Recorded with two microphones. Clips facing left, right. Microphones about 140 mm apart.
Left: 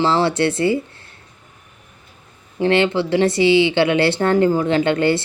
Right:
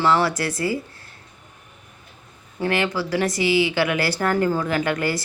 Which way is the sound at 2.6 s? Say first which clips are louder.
Left 6 dB; 25° left (ahead or behind).